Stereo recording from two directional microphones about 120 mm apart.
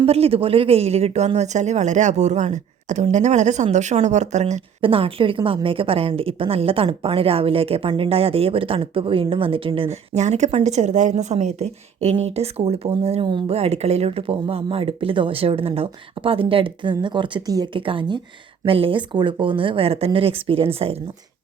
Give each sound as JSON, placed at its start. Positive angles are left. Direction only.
{"t": 0.0, "sound": "speech", "side_deg": -55}
{"t": 4.8, "sound": "speech", "side_deg": -50}
{"t": 10.2, "sound": "speech", "side_deg": -75}